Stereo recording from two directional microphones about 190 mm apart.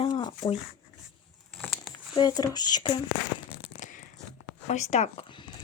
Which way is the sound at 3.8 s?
45° left (ahead or behind).